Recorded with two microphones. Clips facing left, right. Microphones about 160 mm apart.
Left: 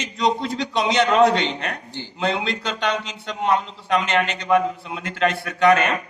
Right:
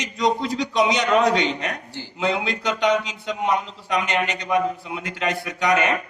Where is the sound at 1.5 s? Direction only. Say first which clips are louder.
Even; 15° right (ahead or behind).